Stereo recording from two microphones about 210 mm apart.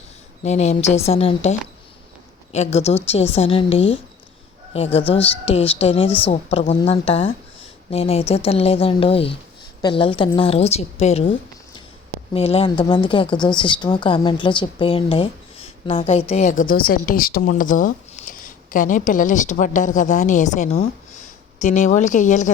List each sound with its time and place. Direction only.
0.4 s a woman's voice: 30° left (ahead or behind)
5.2 s speech: 30° left (ahead or behind)